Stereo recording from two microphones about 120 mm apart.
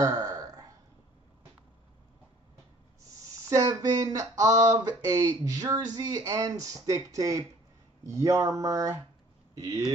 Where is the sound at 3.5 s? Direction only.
30° right (ahead or behind).